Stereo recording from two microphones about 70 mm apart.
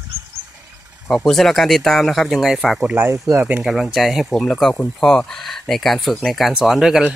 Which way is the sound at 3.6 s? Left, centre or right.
Centre.